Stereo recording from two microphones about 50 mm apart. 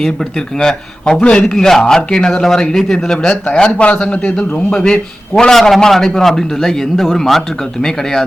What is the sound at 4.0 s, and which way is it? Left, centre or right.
Speech, centre.